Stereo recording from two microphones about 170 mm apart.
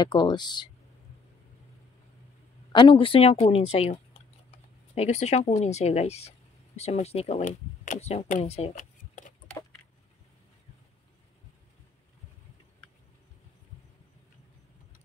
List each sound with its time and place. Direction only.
0.0 s speech: 25° left (ahead or behind)
2.7 s speech: 30° left (ahead or behind)
8.7 s a sound: 50° left (ahead or behind)